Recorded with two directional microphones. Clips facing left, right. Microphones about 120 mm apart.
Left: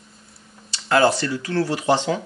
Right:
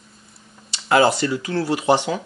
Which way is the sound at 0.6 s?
15° right (ahead or behind).